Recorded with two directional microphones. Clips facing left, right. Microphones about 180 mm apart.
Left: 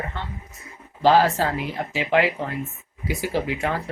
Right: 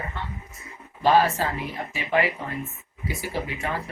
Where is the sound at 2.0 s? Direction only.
90° left.